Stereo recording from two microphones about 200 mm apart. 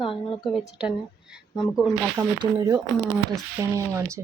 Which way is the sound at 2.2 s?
15° right (ahead or behind).